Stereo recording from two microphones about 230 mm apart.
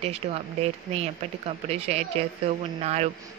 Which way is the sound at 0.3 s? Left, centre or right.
Right.